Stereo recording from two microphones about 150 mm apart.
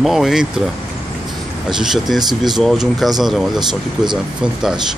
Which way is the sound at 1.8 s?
5° right (ahead or behind).